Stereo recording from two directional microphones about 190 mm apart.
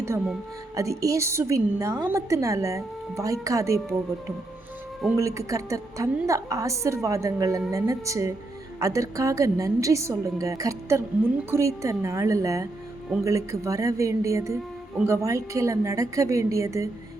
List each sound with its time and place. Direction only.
0.8 s a woman's voice: 15° right (ahead or behind)
5.1 s a woman's voice: 15° right (ahead or behind)